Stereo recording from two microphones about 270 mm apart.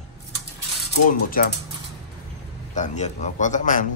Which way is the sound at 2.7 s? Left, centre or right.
Left.